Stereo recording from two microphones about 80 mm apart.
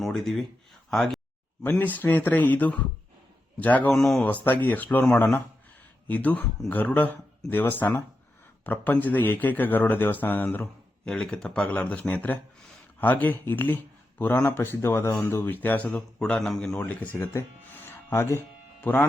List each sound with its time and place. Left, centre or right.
0.0 s speech: centre
0.9 s a sound: centre
1.8 s a man's voice: left
3.9 s speech: centre
4.4 s a man's voice: left
16.8 s a man's voice: left
17.7 s music: left